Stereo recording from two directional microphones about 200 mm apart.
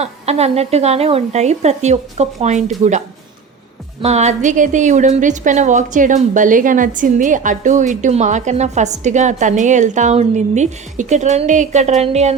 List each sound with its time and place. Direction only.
0.0 s a woman's voice: 30° right (ahead or behind)
4.0 s a woman's voice: 35° right (ahead or behind)